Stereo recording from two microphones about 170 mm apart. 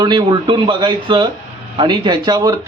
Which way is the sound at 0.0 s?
25° right (ahead or behind).